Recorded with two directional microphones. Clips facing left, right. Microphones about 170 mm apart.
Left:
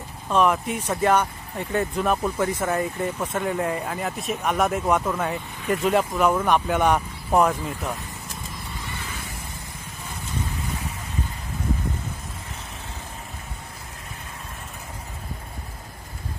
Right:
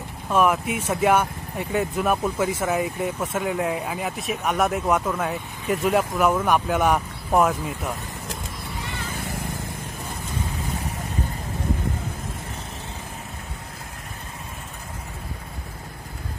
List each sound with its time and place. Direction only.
0.3 s speech: 5° right (ahead or behind)